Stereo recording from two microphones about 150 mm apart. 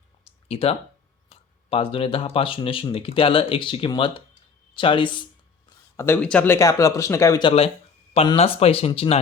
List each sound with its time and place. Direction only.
0.4 s speech: 40° left (ahead or behind)
4.7 s a sound: 35° left (ahead or behind)
6.0 s speech: 10° left (ahead or behind)
7.4 s speech: 40° left (ahead or behind)